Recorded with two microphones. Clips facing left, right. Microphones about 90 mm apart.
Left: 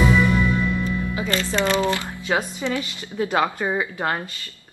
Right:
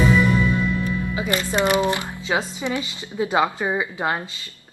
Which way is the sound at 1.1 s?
20° right (ahead or behind).